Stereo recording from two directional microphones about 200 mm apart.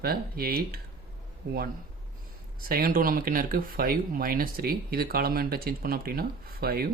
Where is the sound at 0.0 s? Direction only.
50° right (ahead or behind).